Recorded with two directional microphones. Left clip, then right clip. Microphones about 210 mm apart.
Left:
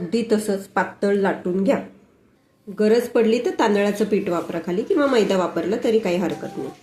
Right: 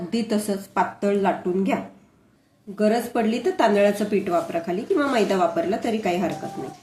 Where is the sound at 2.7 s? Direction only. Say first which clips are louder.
Left 4 dB; 15° left (ahead or behind).